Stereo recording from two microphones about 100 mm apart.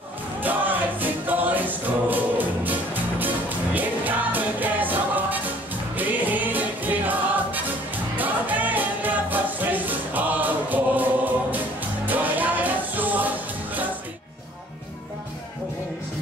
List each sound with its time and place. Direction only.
0.4 s music: 20° right (ahead or behind)